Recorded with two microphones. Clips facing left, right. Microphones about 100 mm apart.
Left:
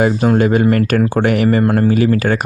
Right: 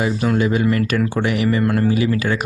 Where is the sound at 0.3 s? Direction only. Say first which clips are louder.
Left 3 dB; 50° left (ahead or behind).